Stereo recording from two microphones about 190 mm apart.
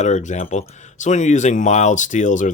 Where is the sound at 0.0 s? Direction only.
40° left (ahead or behind).